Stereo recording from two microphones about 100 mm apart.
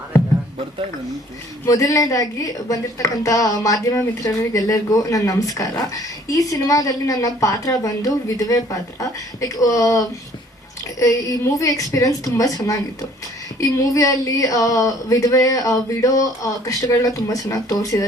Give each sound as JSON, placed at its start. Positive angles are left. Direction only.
{"t": 1.6, "sound": "a woman's voice", "side_deg": 35}
{"t": 11.6, "sound": "a woman's voice", "side_deg": 35}